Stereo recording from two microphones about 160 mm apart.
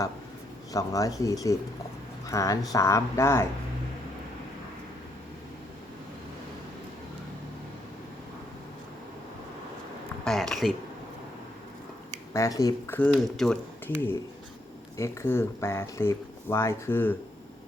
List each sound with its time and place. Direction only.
0.7 s speech: 20° left (ahead or behind)
10.2 s speech: centre (ahead or behind)
12.3 s speech: 20° left (ahead or behind)
13.0 s speech: centre (ahead or behind)
14.9 s speech: 15° left (ahead or behind)